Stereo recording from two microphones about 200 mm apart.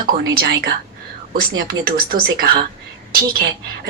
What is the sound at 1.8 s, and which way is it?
Speech, 50° right (ahead or behind).